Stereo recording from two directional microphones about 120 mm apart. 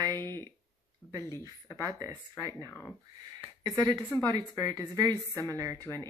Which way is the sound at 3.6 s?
35° right (ahead or behind).